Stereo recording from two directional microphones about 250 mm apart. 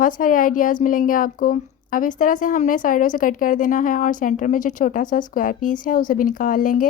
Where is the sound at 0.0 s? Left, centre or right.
Left.